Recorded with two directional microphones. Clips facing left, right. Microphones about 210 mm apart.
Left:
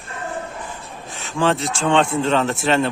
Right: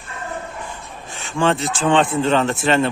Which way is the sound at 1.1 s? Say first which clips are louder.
Right 1 dB; centre (ahead or behind).